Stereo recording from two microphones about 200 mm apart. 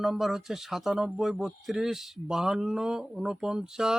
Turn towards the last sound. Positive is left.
turn(degrees=-5)  # may be behind; listen again after turning